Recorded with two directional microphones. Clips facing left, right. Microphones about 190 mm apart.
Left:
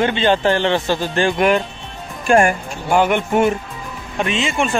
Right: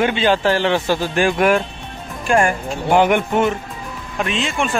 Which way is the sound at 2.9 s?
15° right (ahead or behind).